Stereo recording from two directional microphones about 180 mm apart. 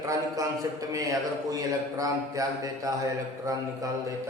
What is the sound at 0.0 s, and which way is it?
A man's voice, 20° right (ahead or behind).